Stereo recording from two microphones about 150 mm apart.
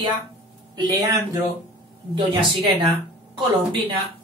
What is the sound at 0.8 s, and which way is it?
Speech, 25° right (ahead or behind).